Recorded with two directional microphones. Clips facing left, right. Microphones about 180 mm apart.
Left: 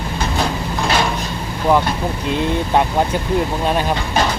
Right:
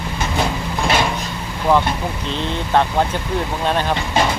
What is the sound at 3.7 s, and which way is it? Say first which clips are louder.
Speech: right 1 dB; 10° left (ahead or behind).